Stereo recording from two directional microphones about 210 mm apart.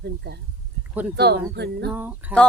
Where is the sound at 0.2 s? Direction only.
50° right (ahead or behind).